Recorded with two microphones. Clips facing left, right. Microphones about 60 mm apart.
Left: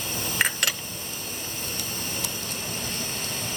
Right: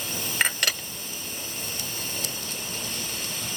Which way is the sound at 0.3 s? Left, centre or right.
Centre.